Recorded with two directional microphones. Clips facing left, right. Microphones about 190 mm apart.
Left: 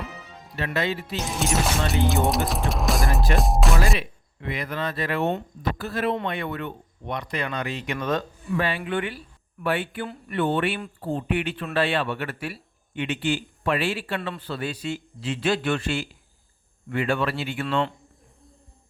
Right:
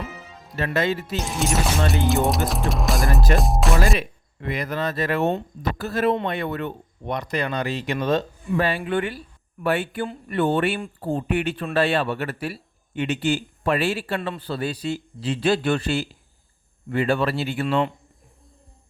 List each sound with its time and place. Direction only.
0.5 s speech: 45° right (ahead or behind)
1.4 s speech: centre (ahead or behind)
3.9 s a man's voice: 45° right (ahead or behind); by 8.2 s 30° right (ahead or behind)
8.5 s a man's voice: 40° right (ahead or behind)